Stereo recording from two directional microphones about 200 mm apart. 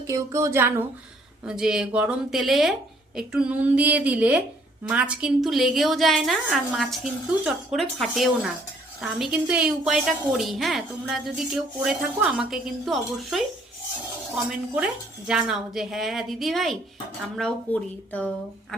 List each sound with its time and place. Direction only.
0.1 s a woman's voice: 15° right (ahead or behind)
15.3 s a woman's voice: 5° right (ahead or behind)